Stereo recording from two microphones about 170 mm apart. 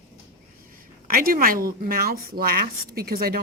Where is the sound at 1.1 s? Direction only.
60° right (ahead or behind).